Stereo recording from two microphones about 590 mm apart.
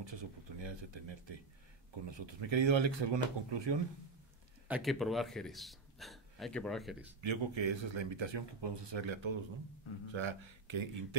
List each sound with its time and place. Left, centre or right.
0.0 s speech: right
4.6 s a man's voice: centre
7.2 s speech: right